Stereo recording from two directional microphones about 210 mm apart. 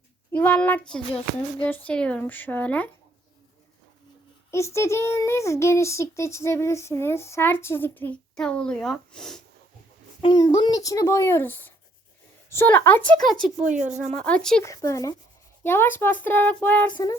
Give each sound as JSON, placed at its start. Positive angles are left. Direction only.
{"t": 0.3, "sound": "a child's voice", "side_deg": 5}
{"t": 4.5, "sound": "a child's voice", "side_deg": 15}
{"t": 10.2, "sound": "a child's voice", "side_deg": 20}
{"t": 13.7, "sound": "speech", "side_deg": -5}
{"t": 14.1, "sound": "speech", "side_deg": 5}
{"t": 14.6, "sound": "a child's voice", "side_deg": 15}